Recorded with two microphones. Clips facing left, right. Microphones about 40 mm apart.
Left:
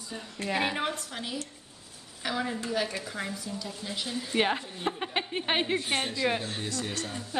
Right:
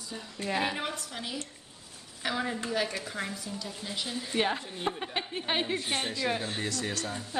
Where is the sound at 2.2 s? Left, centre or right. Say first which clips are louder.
Even; centre.